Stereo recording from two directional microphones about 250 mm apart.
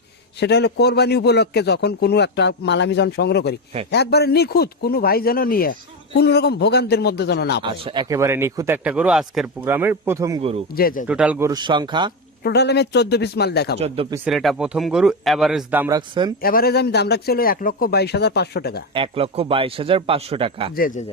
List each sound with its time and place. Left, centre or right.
0.3 s a man's voice: left
7.6 s speech: centre
10.8 s a man's voice: left
11.1 s speech: centre
12.4 s a man's voice: left
13.7 s a man's voice: right
14.3 s a man's voice: centre
16.4 s a man's voice: left
18.9 s a man's voice: right
20.7 s a man's voice: left